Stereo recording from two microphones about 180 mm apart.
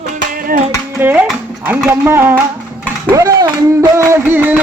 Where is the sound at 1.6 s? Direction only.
10° right (ahead or behind).